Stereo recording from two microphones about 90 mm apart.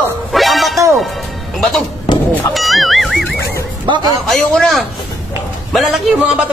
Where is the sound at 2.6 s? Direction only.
Centre (ahead or behind).